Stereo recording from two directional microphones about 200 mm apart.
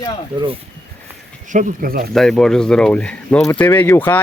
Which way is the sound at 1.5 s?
40° right (ahead or behind).